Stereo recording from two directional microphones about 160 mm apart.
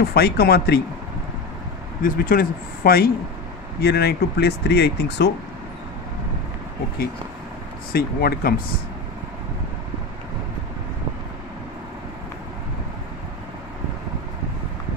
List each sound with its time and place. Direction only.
0.1 s speech: 80° left
2.0 s speech: 60° left (ahead or behind)
3.8 s speech: 90° left
7.9 s speech: 75° left (ahead or behind)